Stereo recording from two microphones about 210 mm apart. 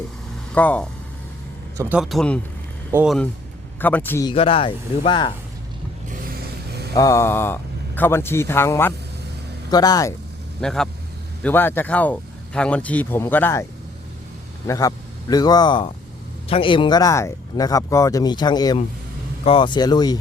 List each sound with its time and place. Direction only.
0.5 s speech: 5° left (ahead or behind)
1.8 s speech: 5° right (ahead or behind)
3.8 s speech: 10° left (ahead or behind)
4.3 s speech: 25° left (ahead or behind)
6.9 s speech: 15° left (ahead or behind)
10.6 s speech: 5° left (ahead or behind)
14.7 s a man's voice: 15° left (ahead or behind)